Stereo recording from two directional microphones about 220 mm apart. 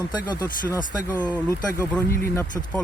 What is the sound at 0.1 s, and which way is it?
Speech, 20° left (ahead or behind).